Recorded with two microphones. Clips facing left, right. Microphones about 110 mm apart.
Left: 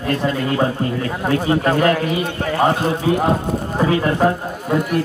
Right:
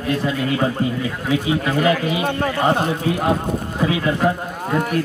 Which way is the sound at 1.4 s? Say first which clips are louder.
Left 4 dB; 45° left (ahead or behind).